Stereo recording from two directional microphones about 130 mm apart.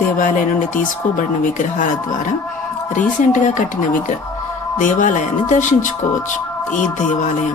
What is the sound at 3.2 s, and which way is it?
Speech, 75° left (ahead or behind).